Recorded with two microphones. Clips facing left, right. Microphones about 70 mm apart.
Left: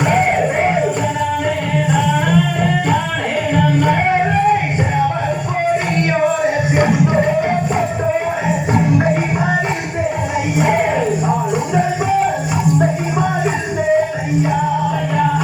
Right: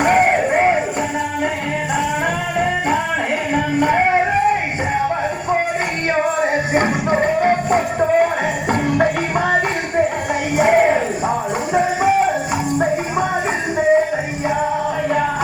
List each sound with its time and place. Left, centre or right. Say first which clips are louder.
0.0 s crowd: even; right
3.5 s music: left 1 dB; right
7.0 s music: left 2 dB; right
8.7 s music: left 1 dB; right
10.6 s music: right 3 dB; right